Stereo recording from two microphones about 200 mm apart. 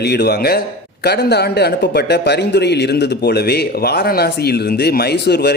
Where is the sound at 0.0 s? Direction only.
55° left (ahead or behind).